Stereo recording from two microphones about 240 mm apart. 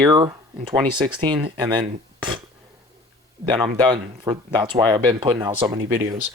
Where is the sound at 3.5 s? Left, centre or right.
Centre.